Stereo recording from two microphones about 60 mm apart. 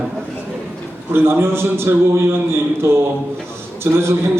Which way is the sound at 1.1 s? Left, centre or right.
Right.